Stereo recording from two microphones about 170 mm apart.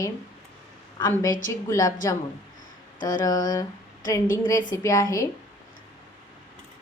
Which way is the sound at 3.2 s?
20° left (ahead or behind).